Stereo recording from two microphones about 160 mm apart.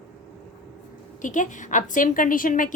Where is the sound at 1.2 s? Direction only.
50° left (ahead or behind).